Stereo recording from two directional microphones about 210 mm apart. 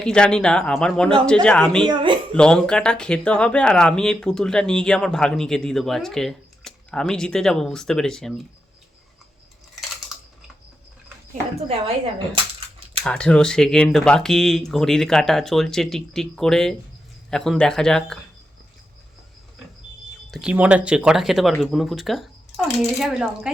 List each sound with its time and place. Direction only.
0.0 s speech: 5° left (ahead or behind)
1.8 s speech: 20° right (ahead or behind)
2.3 s speech: 5° left (ahead or behind)
13.0 s speech: 5° left (ahead or behind)
20.3 s speech: 5° right (ahead or behind)